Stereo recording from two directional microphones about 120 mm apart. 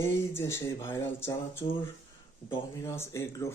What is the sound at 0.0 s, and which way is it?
Speech, 20° left (ahead or behind).